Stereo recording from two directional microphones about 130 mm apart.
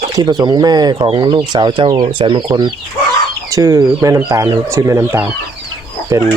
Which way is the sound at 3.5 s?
25° right (ahead or behind).